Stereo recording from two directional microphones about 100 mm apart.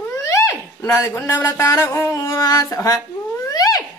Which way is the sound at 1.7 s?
30° left (ahead or behind).